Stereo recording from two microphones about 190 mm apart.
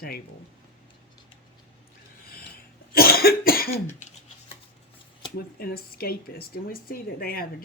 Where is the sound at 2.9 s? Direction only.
55° left (ahead or behind).